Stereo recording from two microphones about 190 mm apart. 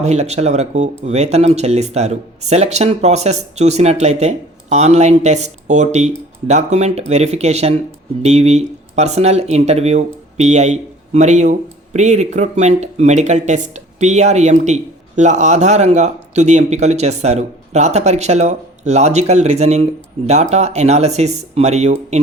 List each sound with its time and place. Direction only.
0.0 s speech: 35° right (ahead or behind)